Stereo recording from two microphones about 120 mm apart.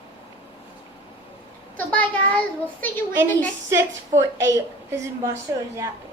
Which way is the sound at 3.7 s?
25° right (ahead or behind).